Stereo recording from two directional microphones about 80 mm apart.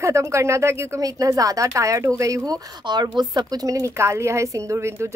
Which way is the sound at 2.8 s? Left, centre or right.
Right.